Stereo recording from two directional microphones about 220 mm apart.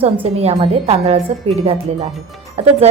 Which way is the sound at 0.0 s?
25° right (ahead or behind).